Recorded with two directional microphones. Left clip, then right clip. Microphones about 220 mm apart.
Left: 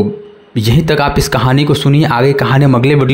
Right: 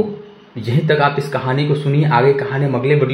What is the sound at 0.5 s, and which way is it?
Speech, 45° left (ahead or behind).